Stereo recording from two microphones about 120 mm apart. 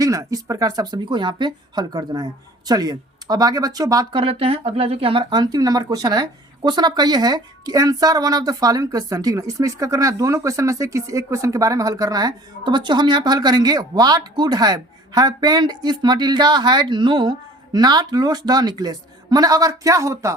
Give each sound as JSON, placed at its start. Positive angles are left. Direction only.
{"t": 0.0, "sound": "speech", "side_deg": -30}
{"t": 4.1, "sound": "speech", "side_deg": -50}